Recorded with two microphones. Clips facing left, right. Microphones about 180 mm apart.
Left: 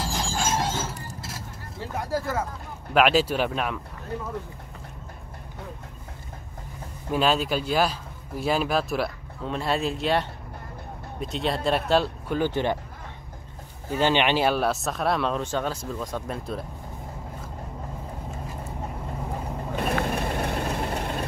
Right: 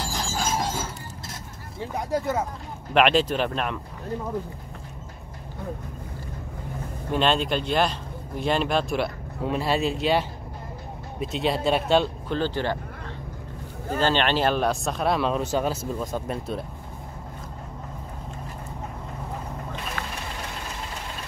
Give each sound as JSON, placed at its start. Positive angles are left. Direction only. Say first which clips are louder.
{"t": 0.0, "sound": "squeal", "louder": "left 1 dB", "side_deg": 0}
{"t": 1.8, "sound": "speech", "louder": "right 2 dB", "side_deg": -15}
{"t": 2.9, "sound": "speech", "louder": "even", "side_deg": 5}
{"t": 7.1, "sound": "speech", "louder": "even", "side_deg": 5}
{"t": 12.4, "sound": "speech", "louder": "left 2 dB", "side_deg": 15}
{"t": 13.9, "sound": "speech", "louder": "left 1 dB", "side_deg": 15}
{"t": 19.8, "sound": "vehicle", "louder": "left 8 dB", "side_deg": 55}